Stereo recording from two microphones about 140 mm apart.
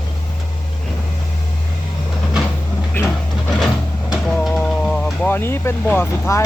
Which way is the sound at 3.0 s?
15° left (ahead or behind).